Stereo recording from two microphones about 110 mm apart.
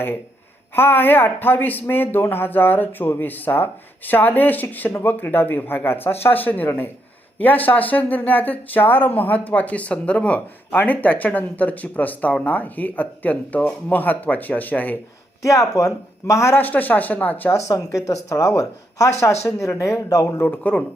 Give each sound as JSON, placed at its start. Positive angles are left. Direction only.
{"t": 0.8, "sound": "speech", "side_deg": 20}
{"t": 15.4, "sound": "speech", "side_deg": 30}
{"t": 17.6, "sound": "speech", "side_deg": 30}
{"t": 20.4, "sound": "speech", "side_deg": 15}